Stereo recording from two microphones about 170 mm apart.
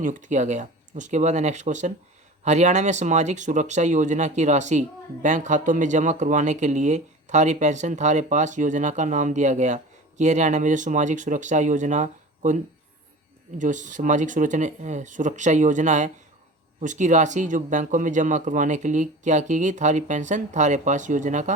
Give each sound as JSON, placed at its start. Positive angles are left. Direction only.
{"t": 0.0, "sound": "speech", "side_deg": -50}
{"t": 13.6, "sound": "speech", "side_deg": -45}